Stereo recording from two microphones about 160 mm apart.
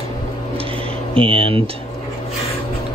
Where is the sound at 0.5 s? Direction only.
35° right (ahead or behind).